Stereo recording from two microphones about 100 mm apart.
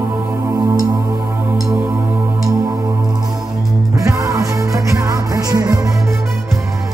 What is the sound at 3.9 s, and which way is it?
Music, 30° right (ahead or behind).